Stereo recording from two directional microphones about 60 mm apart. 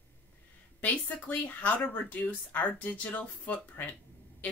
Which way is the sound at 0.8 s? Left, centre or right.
Left.